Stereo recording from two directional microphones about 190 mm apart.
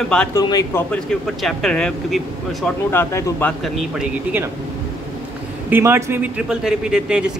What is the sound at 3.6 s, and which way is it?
Speech, 5° right (ahead or behind).